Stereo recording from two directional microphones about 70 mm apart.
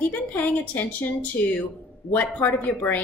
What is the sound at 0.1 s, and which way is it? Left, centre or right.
Speech, left.